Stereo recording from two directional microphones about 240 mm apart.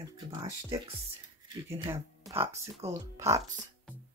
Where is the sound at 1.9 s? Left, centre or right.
Centre.